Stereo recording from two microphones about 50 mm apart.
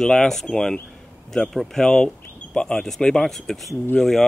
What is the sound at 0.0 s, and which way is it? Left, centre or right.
Speech, centre.